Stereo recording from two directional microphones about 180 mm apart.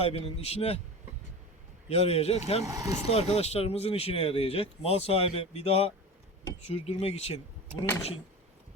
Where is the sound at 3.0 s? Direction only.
35° left (ahead or behind).